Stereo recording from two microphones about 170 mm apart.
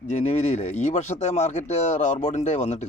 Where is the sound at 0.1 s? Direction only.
45° left (ahead or behind).